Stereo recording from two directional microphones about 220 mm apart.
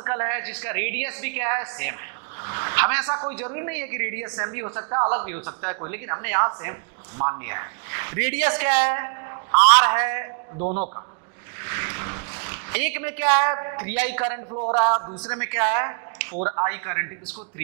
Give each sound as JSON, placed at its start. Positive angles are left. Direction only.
{"t": 0.0, "sound": "a woman's voice", "side_deg": -15}
{"t": 10.6, "sound": "a man's voice", "side_deg": -35}
{"t": 11.6, "sound": "a sound", "side_deg": -15}
{"t": 14.5, "sound": "a man's voice", "side_deg": -20}
{"t": 16.3, "sound": "a man's voice", "side_deg": -30}
{"t": 16.6, "sound": "a woman's voice", "side_deg": -15}